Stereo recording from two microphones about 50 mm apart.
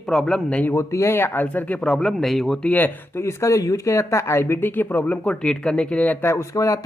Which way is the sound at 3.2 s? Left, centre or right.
Left.